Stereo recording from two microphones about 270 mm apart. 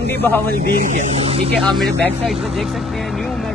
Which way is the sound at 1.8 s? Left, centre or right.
Centre.